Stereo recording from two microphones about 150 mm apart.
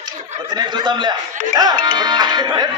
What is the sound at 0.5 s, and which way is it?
Speech, 30° right (ahead or behind).